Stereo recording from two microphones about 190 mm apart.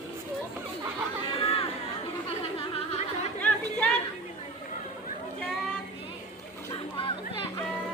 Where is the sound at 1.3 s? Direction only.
30° left (ahead or behind).